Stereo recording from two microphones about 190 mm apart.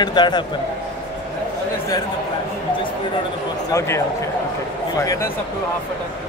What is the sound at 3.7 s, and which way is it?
Speech, 15° left (ahead or behind).